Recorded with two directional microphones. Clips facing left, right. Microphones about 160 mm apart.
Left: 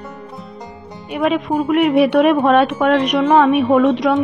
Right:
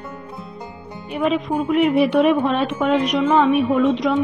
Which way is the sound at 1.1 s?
70° left (ahead or behind).